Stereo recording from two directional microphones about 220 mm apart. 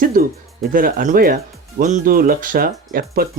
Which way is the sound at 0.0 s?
40° right (ahead or behind).